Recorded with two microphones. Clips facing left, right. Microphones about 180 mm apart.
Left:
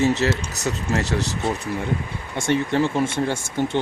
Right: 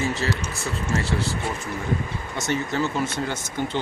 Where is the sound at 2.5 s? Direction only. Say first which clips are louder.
Left 5 dB; 60° left (ahead or behind).